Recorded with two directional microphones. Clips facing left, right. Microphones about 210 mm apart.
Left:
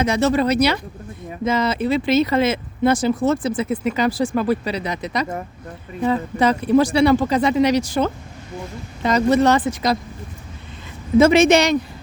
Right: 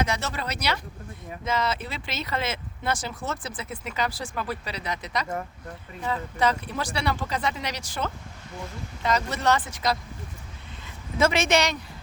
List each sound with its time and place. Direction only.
0.0 s speech: 20° left (ahead or behind)
11.2 s speech: 20° left (ahead or behind)